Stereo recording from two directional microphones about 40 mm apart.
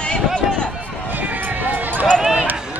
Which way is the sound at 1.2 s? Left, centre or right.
Right.